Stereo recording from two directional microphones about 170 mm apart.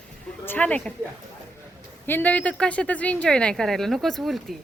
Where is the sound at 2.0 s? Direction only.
10° left (ahead or behind).